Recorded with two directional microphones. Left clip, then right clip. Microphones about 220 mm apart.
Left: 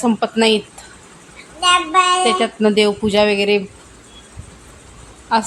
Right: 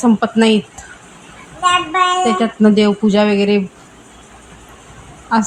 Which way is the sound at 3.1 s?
15° left (ahead or behind).